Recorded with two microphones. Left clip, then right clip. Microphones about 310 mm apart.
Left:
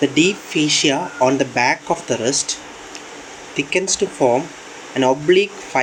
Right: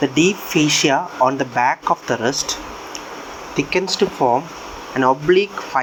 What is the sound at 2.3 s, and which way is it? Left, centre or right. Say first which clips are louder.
Speech: left 1 dB; centre.